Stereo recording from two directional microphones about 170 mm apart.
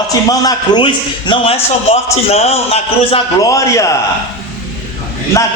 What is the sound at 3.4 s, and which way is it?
Speech, 20° left (ahead or behind).